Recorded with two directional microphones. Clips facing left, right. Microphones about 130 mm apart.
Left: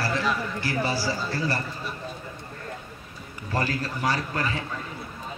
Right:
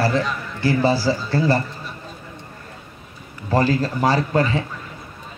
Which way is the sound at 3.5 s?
30° right (ahead or behind).